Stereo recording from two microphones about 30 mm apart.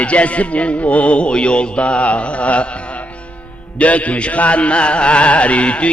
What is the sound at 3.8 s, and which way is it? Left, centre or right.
Music, left.